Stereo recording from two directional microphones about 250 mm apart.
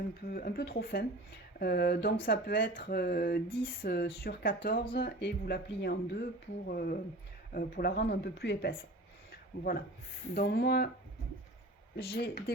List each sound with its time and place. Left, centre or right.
0.3 s speech: left
9.3 s a sound: left
10.3 s speech: left
12.0 s speech: left